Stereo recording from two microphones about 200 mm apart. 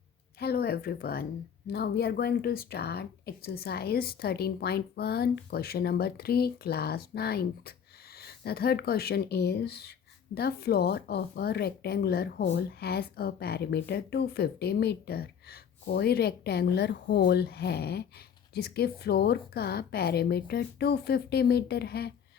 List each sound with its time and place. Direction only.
0.3 s speech: 50° left (ahead or behind)